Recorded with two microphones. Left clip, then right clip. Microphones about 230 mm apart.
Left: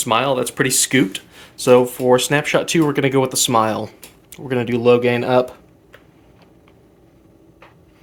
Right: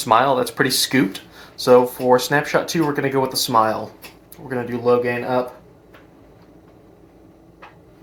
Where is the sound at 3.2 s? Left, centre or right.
Left.